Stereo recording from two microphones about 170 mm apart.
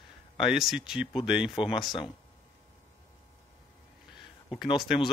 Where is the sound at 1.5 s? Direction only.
30° left (ahead or behind).